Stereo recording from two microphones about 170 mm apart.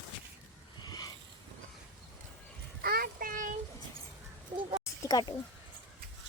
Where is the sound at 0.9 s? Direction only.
25° left (ahead or behind).